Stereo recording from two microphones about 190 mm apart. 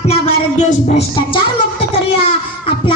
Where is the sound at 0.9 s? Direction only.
30° left (ahead or behind).